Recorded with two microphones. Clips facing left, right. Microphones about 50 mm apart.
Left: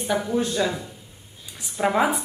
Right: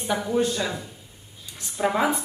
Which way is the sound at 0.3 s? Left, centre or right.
Centre.